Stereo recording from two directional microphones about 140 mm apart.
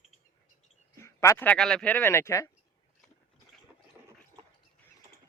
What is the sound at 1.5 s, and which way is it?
Speech, 5° left (ahead or behind).